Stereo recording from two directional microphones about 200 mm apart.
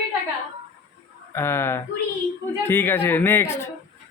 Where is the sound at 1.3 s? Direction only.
10° left (ahead or behind).